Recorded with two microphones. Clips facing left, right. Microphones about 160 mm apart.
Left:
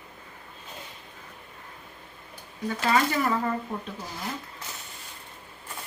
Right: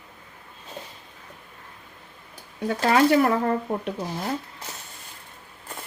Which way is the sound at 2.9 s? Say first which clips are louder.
Right 6 dB; 65° right (ahead or behind).